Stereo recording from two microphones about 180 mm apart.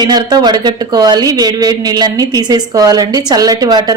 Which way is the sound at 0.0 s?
20° right (ahead or behind).